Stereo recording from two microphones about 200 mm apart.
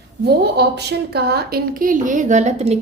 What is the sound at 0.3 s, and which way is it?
A woman's voice, 55° right (ahead or behind).